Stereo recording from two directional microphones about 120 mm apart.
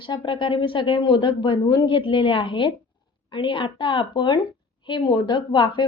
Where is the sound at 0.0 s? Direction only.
40° left (ahead or behind).